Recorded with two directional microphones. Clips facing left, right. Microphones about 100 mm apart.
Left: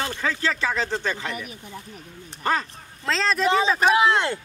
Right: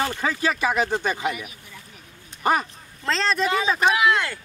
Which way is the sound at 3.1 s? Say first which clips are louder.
Even; centre (ahead or behind).